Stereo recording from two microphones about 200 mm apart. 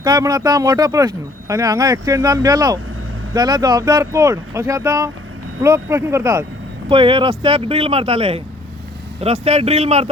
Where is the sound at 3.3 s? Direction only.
20° right (ahead or behind).